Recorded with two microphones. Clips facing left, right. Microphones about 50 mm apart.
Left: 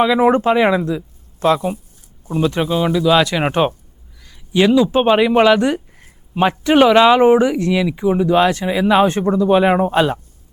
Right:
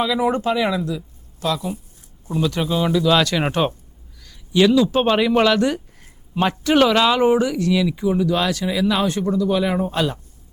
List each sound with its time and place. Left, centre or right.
0.0 s a man's voice: left